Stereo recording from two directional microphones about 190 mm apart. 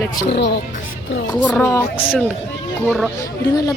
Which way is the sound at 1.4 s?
10° left (ahead or behind).